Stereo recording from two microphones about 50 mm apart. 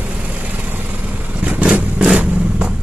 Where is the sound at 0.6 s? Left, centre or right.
Right.